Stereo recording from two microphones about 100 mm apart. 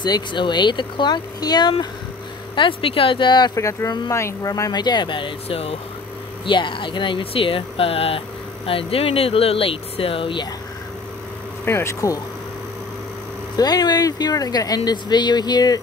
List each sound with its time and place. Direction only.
0.0 s speech: 50° left (ahead or behind)
2.5 s speech: 60° left (ahead or behind); by 5.8 s 75° left (ahead or behind)
6.4 s speech: 55° left (ahead or behind)
11.6 s speech: 25° left (ahead or behind)
13.6 s speech: 40° left (ahead or behind)